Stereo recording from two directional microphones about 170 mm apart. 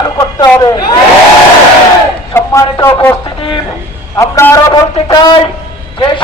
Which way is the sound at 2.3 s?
15° left (ahead or behind).